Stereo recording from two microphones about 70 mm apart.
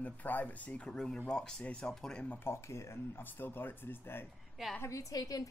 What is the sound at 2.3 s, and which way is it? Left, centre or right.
Speech, left.